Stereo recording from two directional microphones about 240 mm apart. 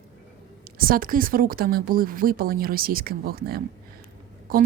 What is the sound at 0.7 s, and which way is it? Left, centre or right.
A woman's voice, right.